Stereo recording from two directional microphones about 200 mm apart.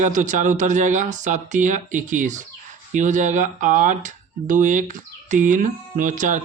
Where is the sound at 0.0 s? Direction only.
40° right (ahead or behind).